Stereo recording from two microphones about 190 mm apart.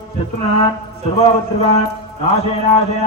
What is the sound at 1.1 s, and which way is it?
Speech, 30° left (ahead or behind).